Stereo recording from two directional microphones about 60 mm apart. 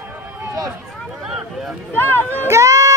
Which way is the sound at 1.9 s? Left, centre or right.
Left.